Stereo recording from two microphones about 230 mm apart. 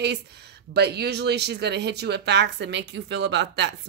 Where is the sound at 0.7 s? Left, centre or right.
Right.